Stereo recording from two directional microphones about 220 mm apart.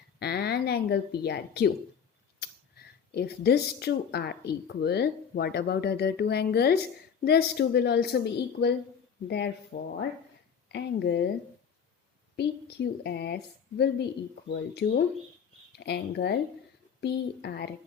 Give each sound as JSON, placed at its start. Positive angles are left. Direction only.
{"t": 0.2, "sound": "a woman's voice", "side_deg": 45}
{"t": 12.4, "sound": "a woman's voice", "side_deg": 50}